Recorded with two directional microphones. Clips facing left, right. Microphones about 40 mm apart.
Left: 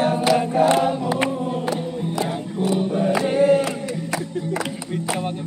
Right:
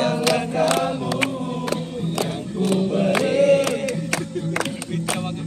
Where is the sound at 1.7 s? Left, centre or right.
Right.